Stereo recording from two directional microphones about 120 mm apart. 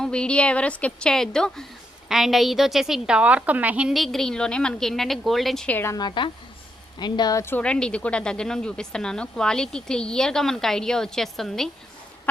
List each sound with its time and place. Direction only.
0.0 s a woman's voice: 10° left (ahead or behind)
5.7 s a woman's voice: 20° left (ahead or behind)
6.0 s a woman's voice: 40° left (ahead or behind)
7.4 s speech: 10° left (ahead or behind)